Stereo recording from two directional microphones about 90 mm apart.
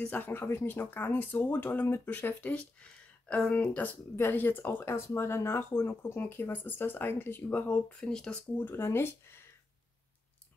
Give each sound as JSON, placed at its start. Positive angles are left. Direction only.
{"t": 0.0, "sound": "speech", "side_deg": 20}
{"t": 8.5, "sound": "speech", "side_deg": 25}